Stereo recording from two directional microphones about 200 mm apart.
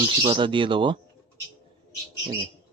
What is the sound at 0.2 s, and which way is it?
Speech, 25° right (ahead or behind).